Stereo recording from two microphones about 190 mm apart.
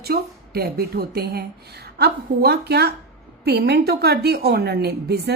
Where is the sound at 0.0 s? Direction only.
55° right (ahead or behind).